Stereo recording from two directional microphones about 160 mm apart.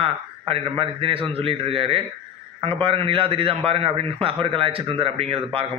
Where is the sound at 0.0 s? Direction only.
35° right (ahead or behind).